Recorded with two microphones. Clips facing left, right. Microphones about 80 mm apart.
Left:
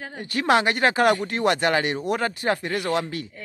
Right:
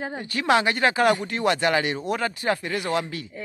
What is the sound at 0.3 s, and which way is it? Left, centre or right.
Speech, left.